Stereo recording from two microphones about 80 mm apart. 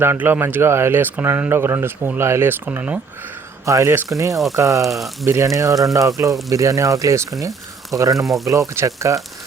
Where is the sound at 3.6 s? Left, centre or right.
Right.